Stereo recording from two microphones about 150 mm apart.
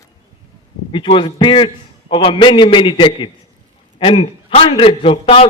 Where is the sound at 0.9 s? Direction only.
35° left (ahead or behind).